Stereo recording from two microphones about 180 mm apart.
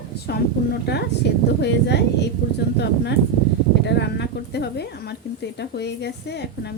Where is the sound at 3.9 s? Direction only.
70° left (ahead or behind).